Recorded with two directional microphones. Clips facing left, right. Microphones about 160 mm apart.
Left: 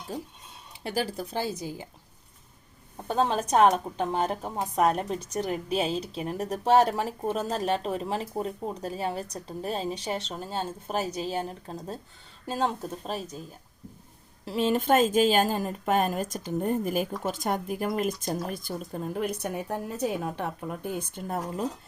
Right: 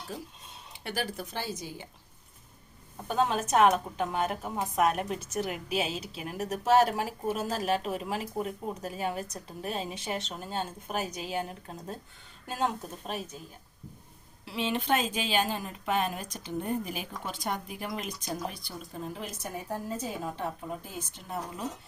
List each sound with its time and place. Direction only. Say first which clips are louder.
0.9 s speech: left 4 dB; 35° left (ahead or behind)
3.1 s speech: left 2 dB; 30° left (ahead or behind)
14.4 s a woman's voice: left 6 dB; 45° left (ahead or behind)